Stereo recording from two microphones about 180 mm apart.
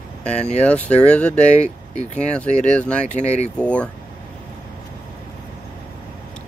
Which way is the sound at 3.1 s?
40° left (ahead or behind).